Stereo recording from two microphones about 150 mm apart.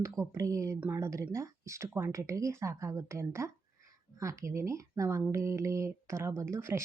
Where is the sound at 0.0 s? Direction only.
20° right (ahead or behind).